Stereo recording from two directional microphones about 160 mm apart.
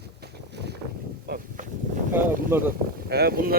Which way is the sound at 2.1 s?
15° right (ahead or behind).